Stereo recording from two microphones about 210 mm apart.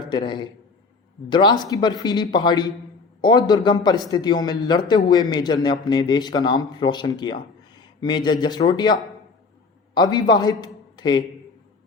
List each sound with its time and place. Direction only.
0.0 s a man's voice: 20° left (ahead or behind)